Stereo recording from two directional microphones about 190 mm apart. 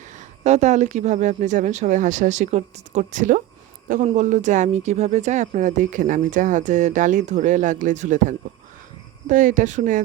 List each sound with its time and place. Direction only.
0.1 s speech: 35° right (ahead or behind)